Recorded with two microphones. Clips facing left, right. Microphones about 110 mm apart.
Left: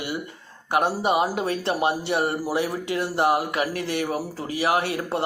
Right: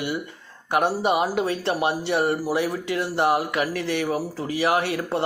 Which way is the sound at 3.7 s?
45° left (ahead or behind).